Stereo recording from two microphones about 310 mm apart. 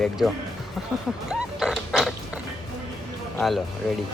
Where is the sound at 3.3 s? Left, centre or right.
Centre.